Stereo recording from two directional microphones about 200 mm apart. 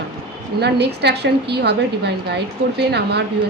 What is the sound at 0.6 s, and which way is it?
A woman's voice, 55° right (ahead or behind).